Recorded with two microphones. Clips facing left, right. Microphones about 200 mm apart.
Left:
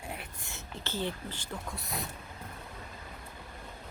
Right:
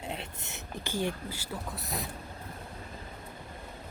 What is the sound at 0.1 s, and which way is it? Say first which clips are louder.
Whispering: right 3 dB; 20° right (ahead or behind).